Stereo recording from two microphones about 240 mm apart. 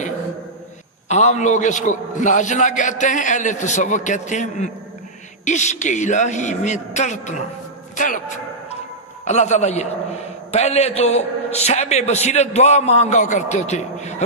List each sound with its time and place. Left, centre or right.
1.0 s a man's voice: left
9.2 s a man's voice: left